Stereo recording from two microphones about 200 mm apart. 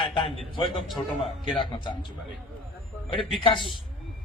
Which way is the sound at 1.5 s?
25° left (ahead or behind).